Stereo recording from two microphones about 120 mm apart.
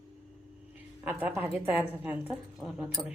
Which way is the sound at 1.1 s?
15° right (ahead or behind).